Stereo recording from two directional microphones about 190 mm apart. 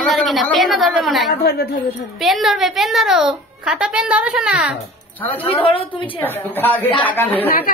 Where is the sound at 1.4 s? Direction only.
55° left (ahead or behind).